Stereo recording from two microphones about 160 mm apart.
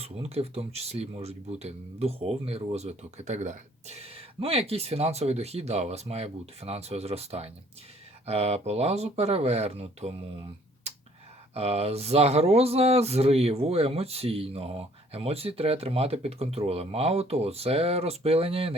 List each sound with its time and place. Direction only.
0.0 s speech: 40° right (ahead or behind)
11.5 s speech: 40° right (ahead or behind)